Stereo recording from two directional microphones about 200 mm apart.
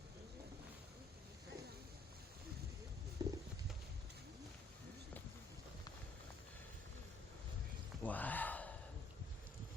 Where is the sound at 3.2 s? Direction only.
20° right (ahead or behind).